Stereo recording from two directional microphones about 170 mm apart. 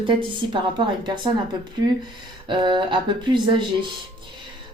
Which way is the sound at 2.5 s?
25° right (ahead or behind).